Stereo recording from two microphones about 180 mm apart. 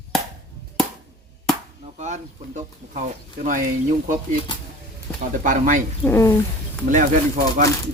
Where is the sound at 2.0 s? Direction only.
40° right (ahead or behind).